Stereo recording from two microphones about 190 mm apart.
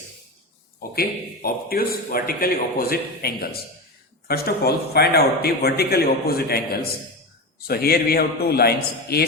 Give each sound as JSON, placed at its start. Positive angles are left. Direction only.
{"t": 0.8, "sound": "a man's voice", "side_deg": 50}
{"t": 7.7, "sound": "a man's voice", "side_deg": 55}